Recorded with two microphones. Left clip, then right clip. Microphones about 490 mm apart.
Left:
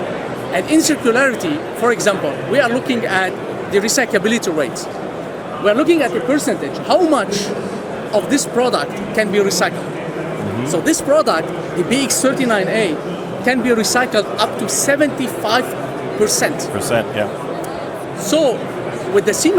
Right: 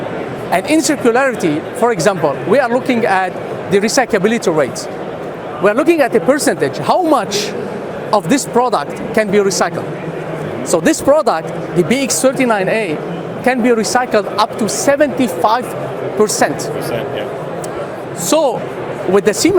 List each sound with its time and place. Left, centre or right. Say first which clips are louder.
0.5 s speech: right 2 dB; right
11.9 s speech: right 1 dB; right
18.3 s speech: right 2 dB; right